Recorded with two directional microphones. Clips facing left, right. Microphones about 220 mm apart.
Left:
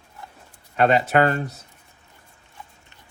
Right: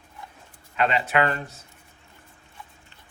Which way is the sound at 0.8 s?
40° left (ahead or behind).